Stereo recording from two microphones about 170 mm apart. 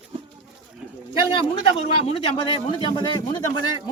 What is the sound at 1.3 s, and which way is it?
A man's voice, 35° left (ahead or behind).